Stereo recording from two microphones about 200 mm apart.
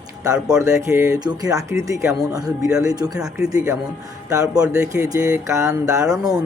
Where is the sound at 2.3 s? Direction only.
20° right (ahead or behind).